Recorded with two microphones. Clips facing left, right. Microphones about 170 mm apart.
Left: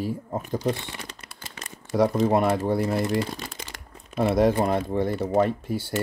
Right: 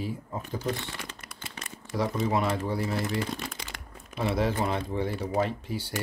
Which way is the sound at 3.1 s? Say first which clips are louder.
Left 4 dB; 35° left (ahead or behind).